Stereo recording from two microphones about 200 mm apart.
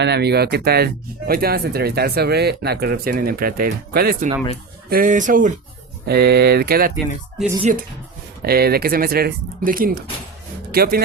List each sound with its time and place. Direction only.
0.0 s speech: 55° right (ahead or behind)
6.1 s speech: 55° right (ahead or behind)
7.4 s speech: 40° right (ahead or behind)
8.4 s speech: 50° right (ahead or behind)